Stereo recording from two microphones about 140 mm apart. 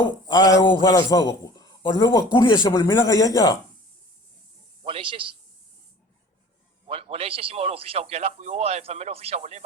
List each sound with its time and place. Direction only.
0.3 s a man's voice: 30° left (ahead or behind)
2.6 s a man's voice: 20° left (ahead or behind)
4.8 s a man's voice: 40° right (ahead or behind)
6.8 s a man's voice: 45° right (ahead or behind)